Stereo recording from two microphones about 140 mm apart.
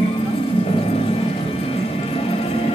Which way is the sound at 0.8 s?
45° left (ahead or behind).